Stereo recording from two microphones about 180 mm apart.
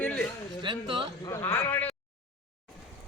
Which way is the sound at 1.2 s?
15° left (ahead or behind).